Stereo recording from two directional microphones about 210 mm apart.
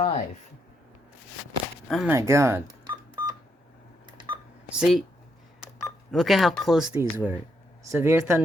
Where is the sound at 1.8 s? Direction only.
Centre (ahead or behind).